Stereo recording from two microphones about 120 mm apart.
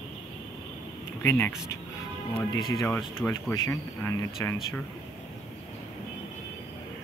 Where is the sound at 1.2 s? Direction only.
20° left (ahead or behind).